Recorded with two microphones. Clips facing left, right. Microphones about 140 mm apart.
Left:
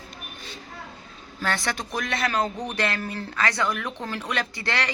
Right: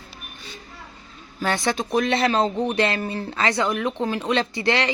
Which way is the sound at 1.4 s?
20° right (ahead or behind).